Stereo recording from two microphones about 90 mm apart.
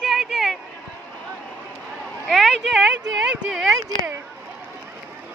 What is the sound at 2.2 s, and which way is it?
Speech, centre (ahead or behind).